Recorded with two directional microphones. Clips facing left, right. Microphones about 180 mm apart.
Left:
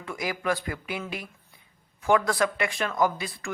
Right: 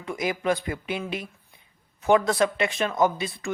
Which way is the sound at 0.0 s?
20° right (ahead or behind).